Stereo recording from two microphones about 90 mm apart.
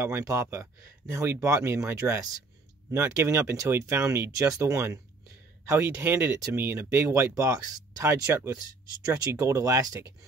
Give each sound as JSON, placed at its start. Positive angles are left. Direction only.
{"t": 0.0, "sound": "speech", "side_deg": -35}